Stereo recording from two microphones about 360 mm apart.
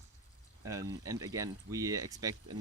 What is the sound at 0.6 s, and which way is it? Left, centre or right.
Speech, centre.